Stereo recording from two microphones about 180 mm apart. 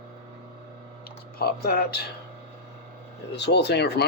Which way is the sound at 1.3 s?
60° left (ahead or behind).